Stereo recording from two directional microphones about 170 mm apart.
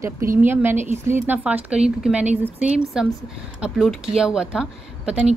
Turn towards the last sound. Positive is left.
turn(degrees=-5)  # may be behind; listen again after turning